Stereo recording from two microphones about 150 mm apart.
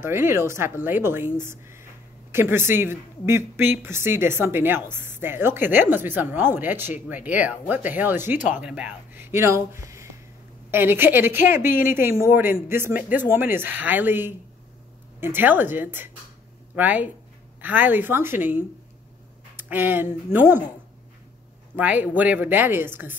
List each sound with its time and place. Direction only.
0.0 s a woman's voice: 15° right (ahead or behind)
21.7 s a woman's voice: 10° right (ahead or behind)